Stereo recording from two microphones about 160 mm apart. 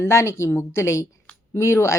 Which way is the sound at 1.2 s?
15° left (ahead or behind).